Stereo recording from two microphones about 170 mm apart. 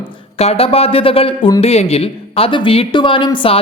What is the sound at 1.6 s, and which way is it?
Speech, 35° left (ahead or behind).